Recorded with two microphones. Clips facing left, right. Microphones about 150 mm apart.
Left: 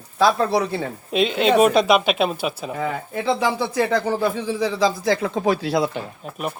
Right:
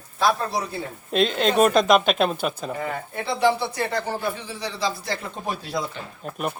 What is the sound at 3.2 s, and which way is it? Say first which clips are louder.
Speech: even; 90° left.